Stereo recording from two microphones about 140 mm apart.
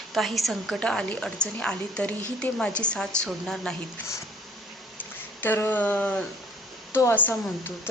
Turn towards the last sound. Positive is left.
turn(degrees=15)  # may be behind; listen again after turning